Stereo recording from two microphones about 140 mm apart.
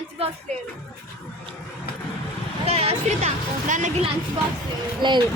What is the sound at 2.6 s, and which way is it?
Speech, 45° right (ahead or behind).